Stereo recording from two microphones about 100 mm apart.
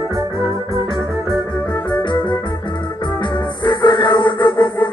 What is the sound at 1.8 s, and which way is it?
Organ, 50° left (ahead or behind).